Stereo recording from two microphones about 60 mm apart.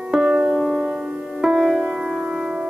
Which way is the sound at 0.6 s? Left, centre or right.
Centre.